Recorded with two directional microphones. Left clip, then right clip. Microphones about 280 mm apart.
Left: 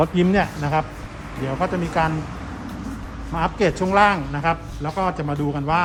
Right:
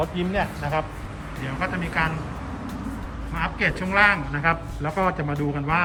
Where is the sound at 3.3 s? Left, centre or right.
Centre.